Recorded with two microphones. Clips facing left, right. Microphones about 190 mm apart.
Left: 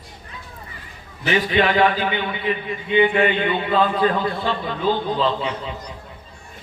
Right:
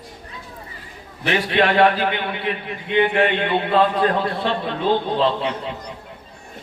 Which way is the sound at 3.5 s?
60° right (ahead or behind).